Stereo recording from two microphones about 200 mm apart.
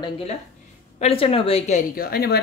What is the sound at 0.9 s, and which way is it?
Speech, 30° left (ahead or behind).